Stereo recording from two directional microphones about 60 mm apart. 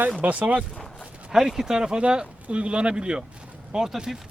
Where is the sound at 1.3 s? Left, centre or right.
Centre.